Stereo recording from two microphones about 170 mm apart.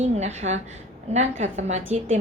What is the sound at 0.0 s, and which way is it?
A woman's voice, 40° right (ahead or behind).